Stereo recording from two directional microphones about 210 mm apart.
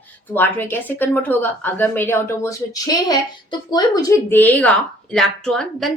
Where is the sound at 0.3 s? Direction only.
10° left (ahead or behind).